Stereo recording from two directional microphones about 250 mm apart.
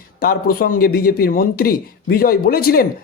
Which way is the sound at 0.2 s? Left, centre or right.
Left.